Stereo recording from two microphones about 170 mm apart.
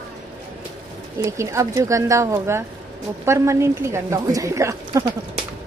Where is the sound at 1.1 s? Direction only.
15° right (ahead or behind).